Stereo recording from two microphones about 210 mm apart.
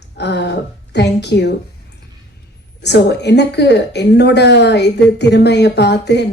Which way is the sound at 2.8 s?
55° left (ahead or behind).